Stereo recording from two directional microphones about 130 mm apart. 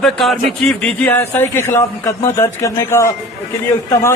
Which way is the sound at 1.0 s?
15° left (ahead or behind).